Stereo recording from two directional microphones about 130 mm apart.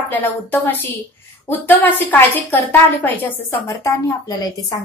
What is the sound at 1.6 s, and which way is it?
A woman's voice, 15° left (ahead or behind).